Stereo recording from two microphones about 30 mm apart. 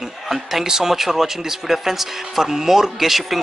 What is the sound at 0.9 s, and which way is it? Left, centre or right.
Speech, centre.